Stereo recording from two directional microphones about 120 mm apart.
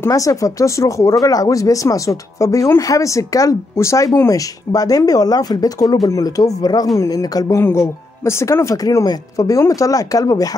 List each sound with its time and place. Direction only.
0.0 s speech: 30° left (ahead or behind)